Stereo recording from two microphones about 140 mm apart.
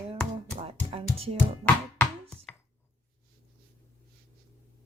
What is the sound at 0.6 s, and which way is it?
Music, 45° right (ahead or behind).